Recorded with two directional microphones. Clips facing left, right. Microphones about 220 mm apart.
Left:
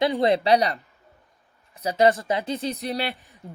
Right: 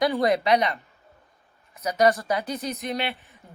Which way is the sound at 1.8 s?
30° left (ahead or behind).